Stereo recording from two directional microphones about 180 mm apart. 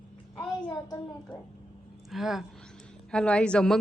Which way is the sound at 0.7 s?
20° left (ahead or behind).